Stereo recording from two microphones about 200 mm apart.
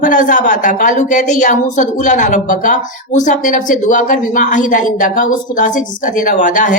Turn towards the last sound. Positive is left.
turn(degrees=40)  # may be behind; listen again after turning